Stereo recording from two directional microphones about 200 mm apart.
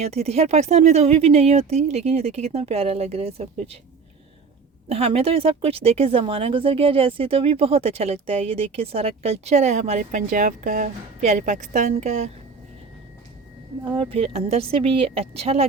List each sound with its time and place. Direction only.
0.0 s speech: 30° right (ahead or behind)
4.9 s speech: 30° right (ahead or behind)
13.9 s speech: 25° right (ahead or behind)